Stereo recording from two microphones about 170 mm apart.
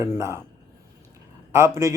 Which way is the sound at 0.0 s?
15° right (ahead or behind).